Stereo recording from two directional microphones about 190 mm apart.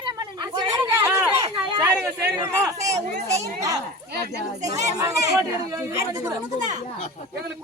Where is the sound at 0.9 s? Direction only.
15° right (ahead or behind).